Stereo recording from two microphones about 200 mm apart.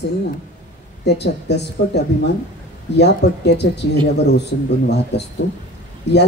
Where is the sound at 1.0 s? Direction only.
55° left (ahead or behind).